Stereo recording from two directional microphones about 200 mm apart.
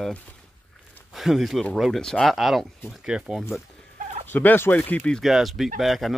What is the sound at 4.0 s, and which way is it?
Fowl, 35° right (ahead or behind).